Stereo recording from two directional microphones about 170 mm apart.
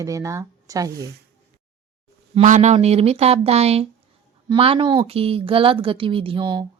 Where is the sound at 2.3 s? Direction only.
45° right (ahead or behind).